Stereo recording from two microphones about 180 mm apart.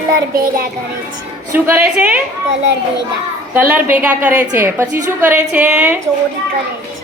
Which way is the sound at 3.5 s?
10° right (ahead or behind).